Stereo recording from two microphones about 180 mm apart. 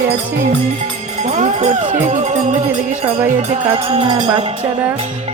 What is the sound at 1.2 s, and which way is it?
Speech, 40° right (ahead or behind).